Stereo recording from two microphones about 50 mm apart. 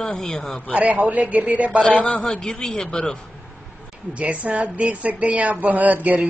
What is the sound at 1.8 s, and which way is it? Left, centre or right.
Speech, left.